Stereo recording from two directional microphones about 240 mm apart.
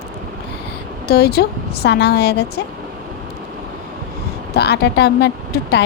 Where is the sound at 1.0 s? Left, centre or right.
Left.